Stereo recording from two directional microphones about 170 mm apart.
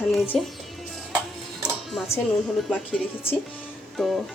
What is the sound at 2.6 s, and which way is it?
Speech, 5° left (ahead or behind).